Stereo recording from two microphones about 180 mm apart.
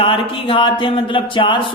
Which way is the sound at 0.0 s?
30° left (ahead or behind).